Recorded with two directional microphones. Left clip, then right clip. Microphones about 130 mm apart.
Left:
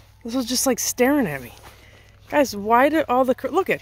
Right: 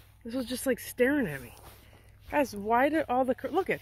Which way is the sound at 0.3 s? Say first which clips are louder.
Left 9 dB; 55° left (ahead or behind).